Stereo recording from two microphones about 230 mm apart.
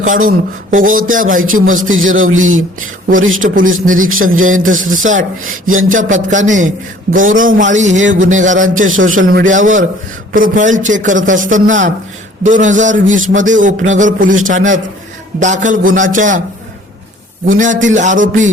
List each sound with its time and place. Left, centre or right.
0.0 s a man's voice: right
1.9 s speech: right
3.4 s a man's voice: right
8.0 s speech: right
8.3 s a man's voice: right
8.9 s speech: right
9.2 s a man's voice: right
17.4 s a man's voice: right